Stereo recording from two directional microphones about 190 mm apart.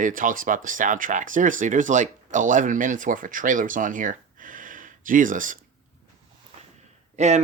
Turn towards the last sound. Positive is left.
turn(degrees=-35)  # may be behind; listen again after turning